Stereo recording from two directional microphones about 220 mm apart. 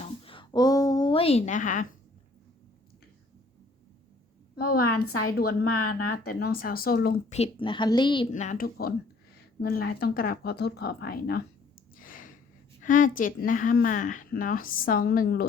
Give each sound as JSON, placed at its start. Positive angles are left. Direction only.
{"t": 0.0, "sound": "a sound", "side_deg": 25}
{"t": 4.5, "sound": "a woman's voice", "side_deg": 45}
{"t": 4.9, "sound": "a woman's voice", "side_deg": 85}
{"t": 6.2, "sound": "speech", "side_deg": 40}
{"t": 7.3, "sound": "a woman's voice", "side_deg": 25}
{"t": 8.3, "sound": "a woman's voice", "side_deg": 35}
{"t": 11.9, "sound": "a sound", "side_deg": 40}
{"t": 12.8, "sound": "a woman's voice", "side_deg": 35}